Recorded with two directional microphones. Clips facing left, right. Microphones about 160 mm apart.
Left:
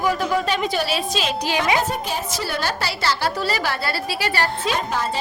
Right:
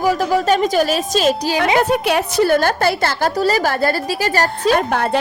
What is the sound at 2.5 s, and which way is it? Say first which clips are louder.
A woman's voice: right 10 dB; 50° right (ahead or behind).